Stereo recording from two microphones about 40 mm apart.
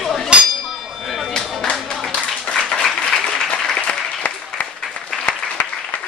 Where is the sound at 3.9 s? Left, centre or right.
Left.